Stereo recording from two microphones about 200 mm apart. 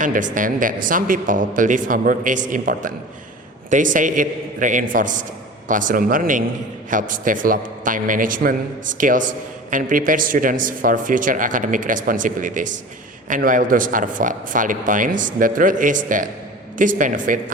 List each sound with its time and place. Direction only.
0.0 s speech: 40° right (ahead or behind)